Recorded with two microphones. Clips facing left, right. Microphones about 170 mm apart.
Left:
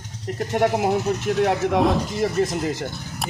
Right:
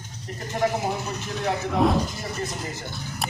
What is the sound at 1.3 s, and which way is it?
Speech, 75° left (ahead or behind).